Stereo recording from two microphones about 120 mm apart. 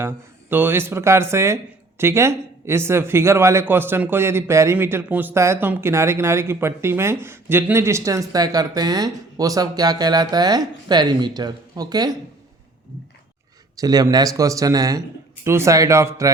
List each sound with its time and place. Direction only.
0.5 s speech: 20° right (ahead or behind); by 12.1 s 35° right (ahead or behind)
13.7 s speech: 30° right (ahead or behind)